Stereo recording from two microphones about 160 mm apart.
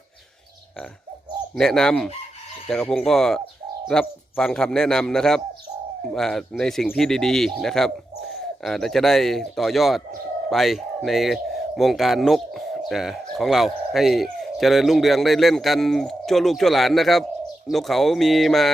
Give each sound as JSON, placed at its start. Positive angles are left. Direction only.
{"t": 1.5, "sound": "speech", "side_deg": 5}